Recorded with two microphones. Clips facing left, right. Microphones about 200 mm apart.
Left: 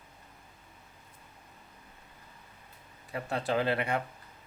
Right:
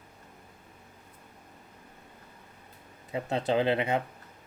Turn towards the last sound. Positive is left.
turn(degrees=-20)  # may be behind; listen again after turning